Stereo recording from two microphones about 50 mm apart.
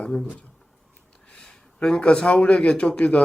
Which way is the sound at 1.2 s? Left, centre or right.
Left.